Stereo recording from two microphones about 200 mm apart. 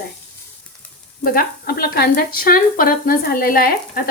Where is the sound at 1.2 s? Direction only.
50° left (ahead or behind).